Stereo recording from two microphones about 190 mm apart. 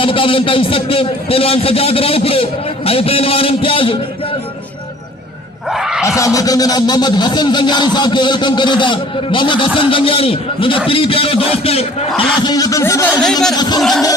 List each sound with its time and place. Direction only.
0.0 s speech: 30° left (ahead or behind)
5.6 s a sound: centre (ahead or behind)
6.1 s speech: 15° left (ahead or behind)
12.4 s music: 20° left (ahead or behind)
13.2 s a man's voice: centre (ahead or behind)
13.5 s speech: 20° left (ahead or behind)